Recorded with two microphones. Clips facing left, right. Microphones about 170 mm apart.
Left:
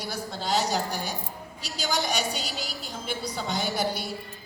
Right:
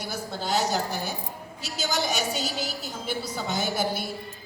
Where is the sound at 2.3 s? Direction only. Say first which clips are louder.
Right 4 dB; 45° right (ahead or behind).